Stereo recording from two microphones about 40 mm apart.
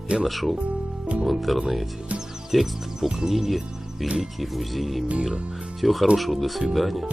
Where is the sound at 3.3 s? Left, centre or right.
Centre.